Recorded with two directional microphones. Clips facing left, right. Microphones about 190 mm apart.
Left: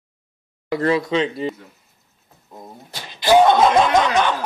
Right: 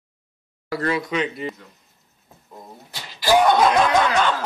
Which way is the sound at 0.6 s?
25° left (ahead or behind).